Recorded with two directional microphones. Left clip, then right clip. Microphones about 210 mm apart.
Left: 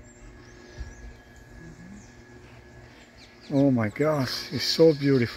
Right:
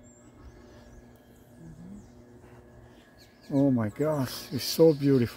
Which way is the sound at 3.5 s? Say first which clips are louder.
Left 3 dB; 5° left (ahead or behind).